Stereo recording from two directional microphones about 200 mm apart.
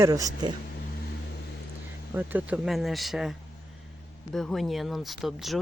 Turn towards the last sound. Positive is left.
turn(degrees=0)  # may be behind; listen again after turning